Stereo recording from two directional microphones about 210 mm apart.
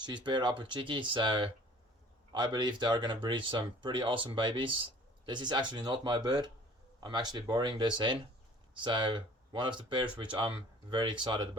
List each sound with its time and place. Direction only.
0.0 s speech: 20° right (ahead or behind)